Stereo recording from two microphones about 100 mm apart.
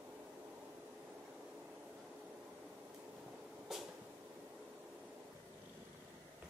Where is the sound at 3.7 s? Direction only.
5° right (ahead or behind).